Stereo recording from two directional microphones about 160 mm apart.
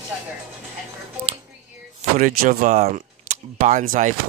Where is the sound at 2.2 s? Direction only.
60° right (ahead or behind).